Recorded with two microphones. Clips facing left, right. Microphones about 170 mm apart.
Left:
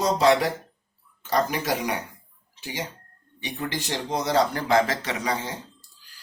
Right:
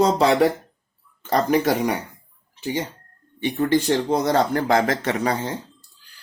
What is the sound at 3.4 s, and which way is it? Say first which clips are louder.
Speech: right 11 dB; 50° right (ahead or behind).